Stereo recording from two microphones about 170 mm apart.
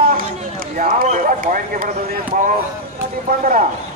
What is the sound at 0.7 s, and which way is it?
Speech, 45° right (ahead or behind).